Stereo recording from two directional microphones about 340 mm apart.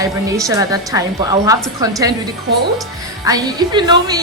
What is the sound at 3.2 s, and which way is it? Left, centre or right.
Speech, centre.